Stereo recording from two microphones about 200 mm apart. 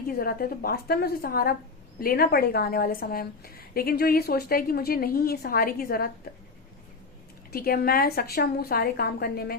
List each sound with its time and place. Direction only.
0.1 s a woman's voice: 45° left (ahead or behind)
7.5 s a woman's voice: 50° left (ahead or behind)